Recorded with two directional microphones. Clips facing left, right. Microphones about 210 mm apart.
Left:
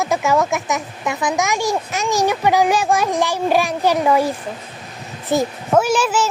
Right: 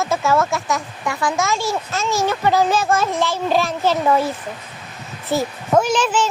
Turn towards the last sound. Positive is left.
turn(degrees=10)  # may be behind; listen again after turning